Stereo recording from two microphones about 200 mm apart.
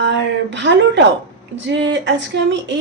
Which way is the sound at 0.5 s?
60° right (ahead or behind).